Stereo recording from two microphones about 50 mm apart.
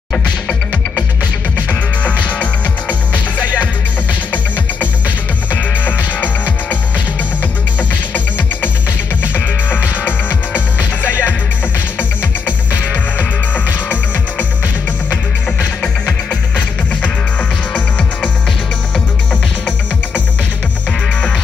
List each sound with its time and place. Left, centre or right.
2.0 s music: left
5.5 s music: left
9.2 s music: left
13.2 s music: left
15.8 s music: left
17.7 s music: left